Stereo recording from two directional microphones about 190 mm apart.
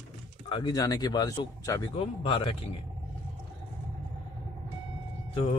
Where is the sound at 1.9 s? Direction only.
30° left (ahead or behind).